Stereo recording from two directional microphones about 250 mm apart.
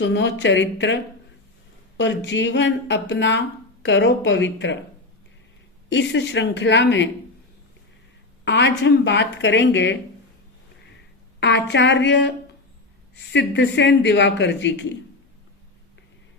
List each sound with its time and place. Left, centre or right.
0.0 s a man's voice: left
5.9 s a man's voice: left
8.4 s a man's voice: left
11.3 s a man's voice: left
13.3 s a man's voice: left